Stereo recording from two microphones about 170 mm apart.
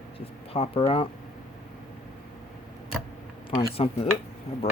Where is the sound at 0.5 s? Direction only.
35° left (ahead or behind).